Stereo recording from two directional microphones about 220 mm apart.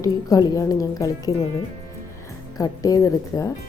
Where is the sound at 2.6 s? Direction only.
15° left (ahead or behind).